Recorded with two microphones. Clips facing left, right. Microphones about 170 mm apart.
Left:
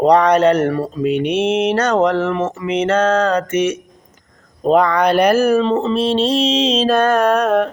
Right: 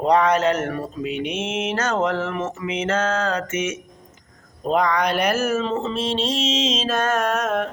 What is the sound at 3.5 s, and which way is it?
Mantra, 65° left (ahead or behind).